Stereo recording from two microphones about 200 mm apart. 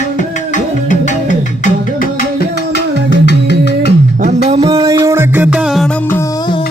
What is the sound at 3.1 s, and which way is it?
Music, 55° left (ahead or behind).